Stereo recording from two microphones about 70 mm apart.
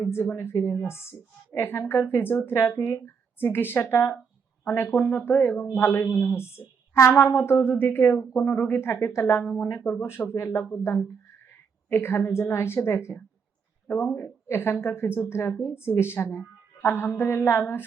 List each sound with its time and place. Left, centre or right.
0.3 s a woman's voice: left
13.8 s speech: left
14.4 s a woman's voice: left